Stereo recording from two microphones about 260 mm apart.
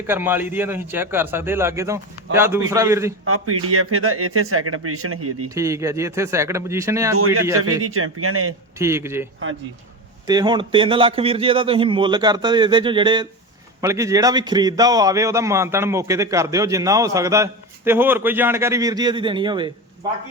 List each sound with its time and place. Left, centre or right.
0.1 s a man's voice: centre
3.2 s speech: right
5.5 s a man's voice: centre
7.8 s speech: right
8.8 s a man's voice: centre
10.2 s a man's voice: centre